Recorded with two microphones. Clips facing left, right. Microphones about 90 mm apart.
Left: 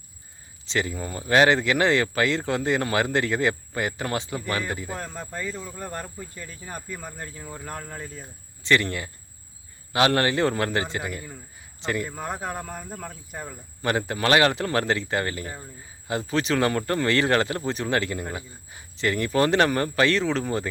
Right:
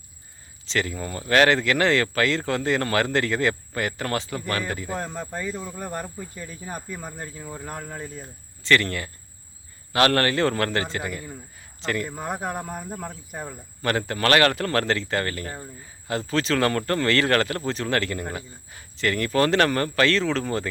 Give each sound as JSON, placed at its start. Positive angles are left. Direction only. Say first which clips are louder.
{"t": 0.6, "sound": "speech", "louder": "even", "side_deg": 15}
{"t": 4.9, "sound": "speech", "louder": "right 4 dB", "side_deg": -35}
{"t": 5.2, "sound": "speech", "louder": "right 2 dB", "side_deg": -15}
{"t": 8.6, "sound": "speech", "louder": "right 1 dB", "side_deg": 15}
{"t": 12.0, "sound": "speech", "louder": "right 2 dB", "side_deg": -15}
{"t": 13.8, "sound": "speech", "louder": "right 1 dB", "side_deg": 15}